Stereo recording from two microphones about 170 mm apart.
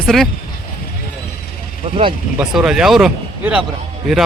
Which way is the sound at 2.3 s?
5° right (ahead or behind).